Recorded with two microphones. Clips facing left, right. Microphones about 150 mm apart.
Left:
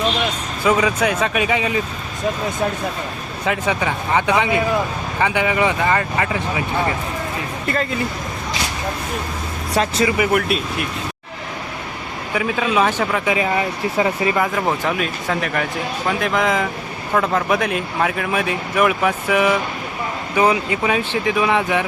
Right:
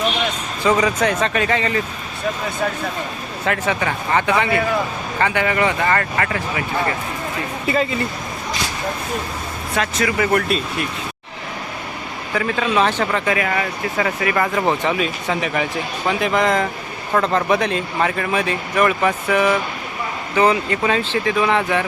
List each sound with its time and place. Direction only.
0.6 s speech: 5° left (ahead or behind)
3.4 s speech: 15° left (ahead or behind)
7.7 s speech: centre (ahead or behind)
9.7 s speech: 30° left (ahead or behind)
10.3 s speech: 5° left (ahead or behind)
12.3 s speech: 5° left (ahead or behind)
13.3 s speech: 20° left (ahead or behind)
14.4 s speech: centre (ahead or behind)